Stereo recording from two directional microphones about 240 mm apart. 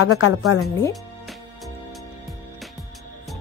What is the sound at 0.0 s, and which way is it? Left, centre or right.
Speech, left.